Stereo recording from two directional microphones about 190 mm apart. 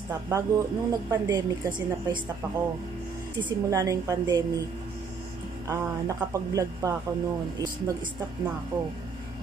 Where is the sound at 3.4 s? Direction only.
20° right (ahead or behind).